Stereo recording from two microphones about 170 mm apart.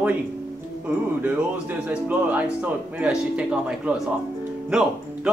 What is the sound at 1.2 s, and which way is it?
Speech, 10° right (ahead or behind).